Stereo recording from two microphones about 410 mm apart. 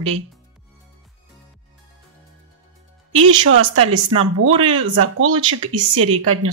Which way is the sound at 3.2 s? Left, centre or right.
Right.